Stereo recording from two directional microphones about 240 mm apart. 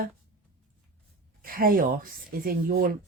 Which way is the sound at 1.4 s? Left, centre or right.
Right.